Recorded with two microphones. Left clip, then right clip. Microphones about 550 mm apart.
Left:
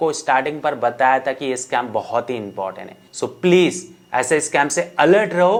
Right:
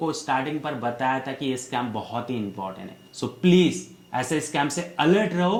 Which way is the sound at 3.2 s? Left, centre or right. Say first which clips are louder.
Left 6 dB; left.